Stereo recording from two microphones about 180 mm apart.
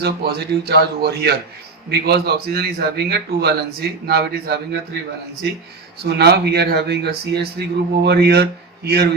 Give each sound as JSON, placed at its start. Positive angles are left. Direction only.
{"t": 0.0, "sound": "speech", "side_deg": -65}
{"t": 6.0, "sound": "speech", "side_deg": -65}